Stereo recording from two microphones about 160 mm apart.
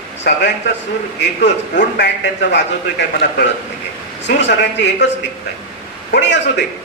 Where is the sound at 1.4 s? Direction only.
90° left.